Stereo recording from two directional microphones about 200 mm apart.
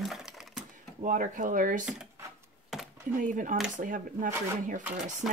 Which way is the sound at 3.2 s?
40° right (ahead or behind).